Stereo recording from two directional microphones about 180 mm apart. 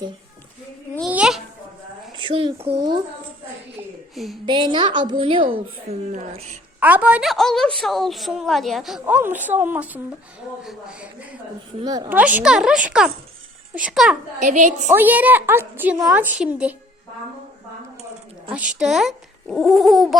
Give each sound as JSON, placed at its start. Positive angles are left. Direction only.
{"t": 1.1, "sound": "babbling", "side_deg": -5}
{"t": 2.1, "sound": "a child's voice", "side_deg": -30}
{"t": 4.1, "sound": "a woman's voice", "side_deg": 0}
{"t": 4.4, "sound": "a child's voice", "side_deg": -25}
{"t": 6.1, "sound": "speech", "side_deg": -40}
{"t": 6.7, "sound": "a woman's voice", "side_deg": -10}
{"t": 11.8, "sound": "a child's voice", "side_deg": -20}
{"t": 12.1, "sound": "a woman's voice", "side_deg": -10}
{"t": 14.3, "sound": "a woman's voice", "side_deg": -45}
{"t": 14.9, "sound": "a woman's voice", "side_deg": -10}
{"t": 18.5, "sound": "a woman's voice", "side_deg": -5}